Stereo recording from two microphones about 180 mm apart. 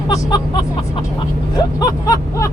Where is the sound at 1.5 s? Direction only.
20° left (ahead or behind).